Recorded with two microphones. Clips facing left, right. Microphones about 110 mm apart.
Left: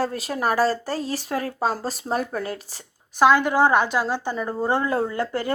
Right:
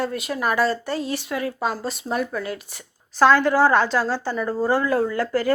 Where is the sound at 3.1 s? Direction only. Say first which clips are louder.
Right 1 dB; 15° left (ahead or behind).